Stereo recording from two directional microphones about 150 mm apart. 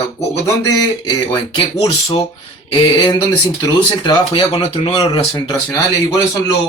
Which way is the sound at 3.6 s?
35° left (ahead or behind).